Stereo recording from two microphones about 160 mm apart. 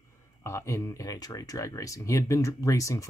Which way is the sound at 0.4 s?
20° left (ahead or behind).